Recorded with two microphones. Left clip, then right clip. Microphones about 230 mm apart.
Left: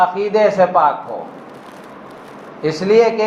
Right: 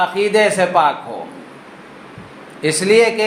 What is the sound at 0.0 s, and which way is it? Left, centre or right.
Speech, right.